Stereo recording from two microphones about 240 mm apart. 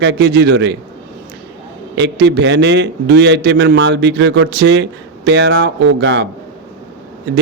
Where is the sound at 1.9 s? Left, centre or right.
Right.